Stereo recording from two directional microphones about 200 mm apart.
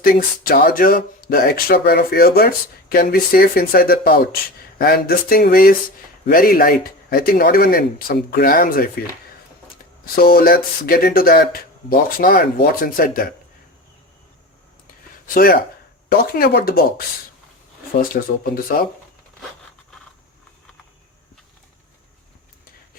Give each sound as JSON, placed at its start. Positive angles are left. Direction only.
{"t": 0.0, "sound": "speech", "side_deg": 45}
{"t": 10.2, "sound": "speech", "side_deg": 45}
{"t": 15.3, "sound": "speech", "side_deg": 45}
{"t": 17.9, "sound": "speech", "side_deg": 45}